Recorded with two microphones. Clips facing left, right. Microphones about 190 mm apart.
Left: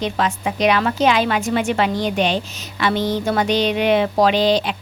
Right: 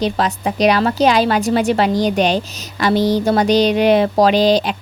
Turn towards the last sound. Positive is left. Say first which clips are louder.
# right 3 dB
turn(degrees=-40)  # may be behind; listen again after turning